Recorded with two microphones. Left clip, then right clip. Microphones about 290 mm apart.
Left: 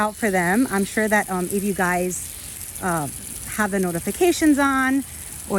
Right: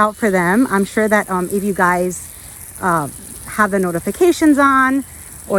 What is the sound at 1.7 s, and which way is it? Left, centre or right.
Speech, right.